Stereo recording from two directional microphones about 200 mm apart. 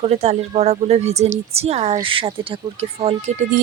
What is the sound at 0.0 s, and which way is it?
Speech, 30° right (ahead or behind).